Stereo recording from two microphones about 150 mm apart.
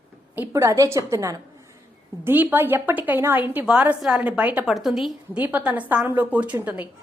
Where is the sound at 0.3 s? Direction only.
20° right (ahead or behind).